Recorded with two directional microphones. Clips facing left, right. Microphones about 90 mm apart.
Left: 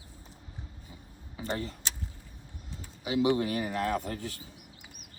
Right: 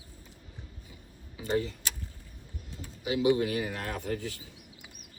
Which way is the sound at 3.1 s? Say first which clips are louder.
Right 1 dB; 40° left (ahead or behind).